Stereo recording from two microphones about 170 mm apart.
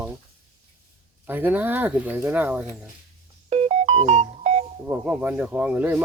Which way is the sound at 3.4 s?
40° right (ahead or behind).